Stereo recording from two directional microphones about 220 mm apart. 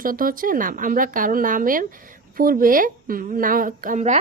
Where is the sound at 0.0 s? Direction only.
40° right (ahead or behind).